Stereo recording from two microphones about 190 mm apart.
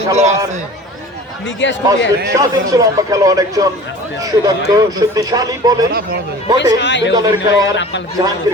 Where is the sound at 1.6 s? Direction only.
75° left (ahead or behind).